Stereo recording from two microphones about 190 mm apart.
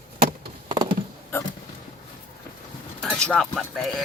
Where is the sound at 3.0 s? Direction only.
5° left (ahead or behind).